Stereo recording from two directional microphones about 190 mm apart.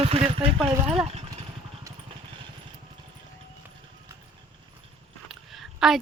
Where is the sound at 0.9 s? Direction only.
30° right (ahead or behind).